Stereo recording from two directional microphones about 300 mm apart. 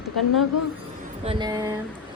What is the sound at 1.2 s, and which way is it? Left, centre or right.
Speech, centre.